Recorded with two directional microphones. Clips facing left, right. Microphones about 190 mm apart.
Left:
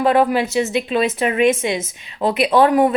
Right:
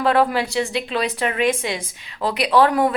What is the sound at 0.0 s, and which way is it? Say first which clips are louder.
A woman's voice: left 3 dB; 20° left (ahead or behind).